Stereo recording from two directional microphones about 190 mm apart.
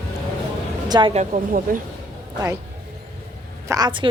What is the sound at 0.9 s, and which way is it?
Speech, 25° right (ahead or behind).